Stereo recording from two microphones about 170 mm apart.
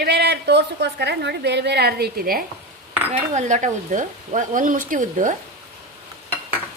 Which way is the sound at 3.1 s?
45° right (ahead or behind).